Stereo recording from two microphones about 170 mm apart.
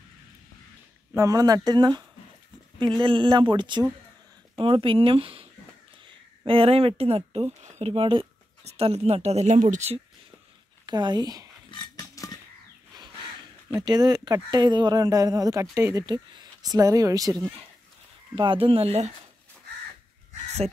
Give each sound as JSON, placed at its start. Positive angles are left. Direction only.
{"t": 1.1, "sound": "speech", "side_deg": -20}
{"t": 10.9, "sound": "speech", "side_deg": -25}
{"t": 11.7, "sound": "pig", "side_deg": 20}
{"t": 13.7, "sound": "speech", "side_deg": -25}